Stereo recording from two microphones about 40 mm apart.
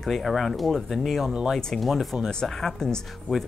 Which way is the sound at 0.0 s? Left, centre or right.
Centre.